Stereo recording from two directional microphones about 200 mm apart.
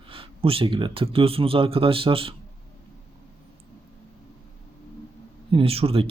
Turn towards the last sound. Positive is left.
turn(degrees=-30)  # may be behind; listen again after turning